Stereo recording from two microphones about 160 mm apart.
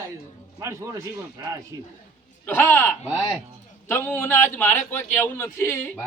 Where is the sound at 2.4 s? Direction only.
10° left (ahead or behind).